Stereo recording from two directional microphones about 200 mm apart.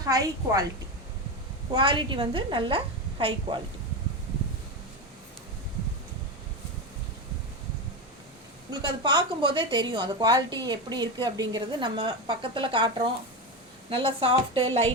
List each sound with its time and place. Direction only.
0.0 s a woman's voice: 15° right (ahead or behind)
1.7 s a woman's voice: 25° right (ahead or behind)
8.7 s a woman's voice: 20° right (ahead or behind)
13.9 s a woman's voice: 25° right (ahead or behind)